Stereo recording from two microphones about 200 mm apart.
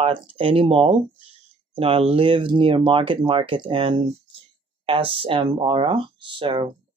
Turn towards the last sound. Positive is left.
turn(degrees=-25)  # may be behind; listen again after turning